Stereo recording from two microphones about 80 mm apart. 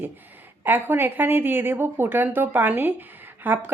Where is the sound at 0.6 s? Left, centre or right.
Right.